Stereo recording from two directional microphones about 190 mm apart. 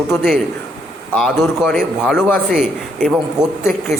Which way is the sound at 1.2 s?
5° left (ahead or behind).